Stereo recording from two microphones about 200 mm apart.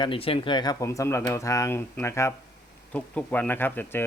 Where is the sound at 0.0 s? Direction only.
25° left (ahead or behind).